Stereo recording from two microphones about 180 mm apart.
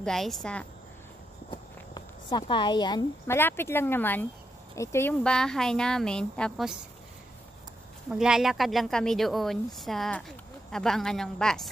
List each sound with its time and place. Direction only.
0.0 s speech: centre (ahead or behind)
1.5 s speech: 25° left (ahead or behind)
5.2 s speech: 5° left (ahead or behind)
8.1 s speech: 5° right (ahead or behind)